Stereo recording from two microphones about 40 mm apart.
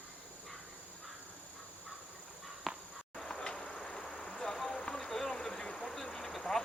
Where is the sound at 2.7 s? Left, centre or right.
Centre.